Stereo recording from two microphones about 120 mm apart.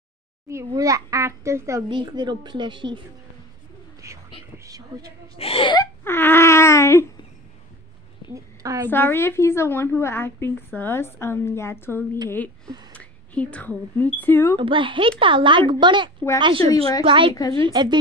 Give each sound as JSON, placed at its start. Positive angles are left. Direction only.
{"t": 0.7, "sound": "a child's voice", "side_deg": -30}
{"t": 1.9, "sound": "a woman's voice", "side_deg": -40}
{"t": 4.0, "sound": "a sound", "side_deg": -25}
{"t": 5.4, "sound": "speech", "side_deg": 50}
{"t": 6.0, "sound": "a sound", "side_deg": 20}
{"t": 8.3, "sound": "a woman's voice", "side_deg": -25}
{"t": 8.9, "sound": "a woman's voice", "side_deg": 20}
{"t": 14.6, "sound": "a woman's voice", "side_deg": -45}